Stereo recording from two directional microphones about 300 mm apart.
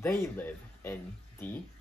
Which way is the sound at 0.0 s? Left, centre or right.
Centre.